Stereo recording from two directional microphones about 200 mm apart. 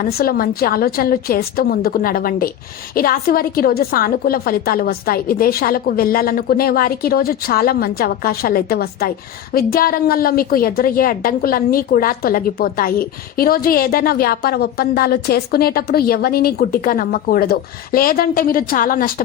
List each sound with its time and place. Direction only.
0.0 s a woman's voice: 50° left (ahead or behind)